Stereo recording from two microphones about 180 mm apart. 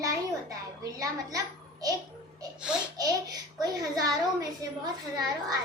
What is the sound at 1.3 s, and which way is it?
Speech, 20° right (ahead or behind).